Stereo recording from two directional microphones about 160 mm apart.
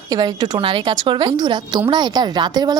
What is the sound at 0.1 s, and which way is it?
A woman's voice, 25° right (ahead or behind).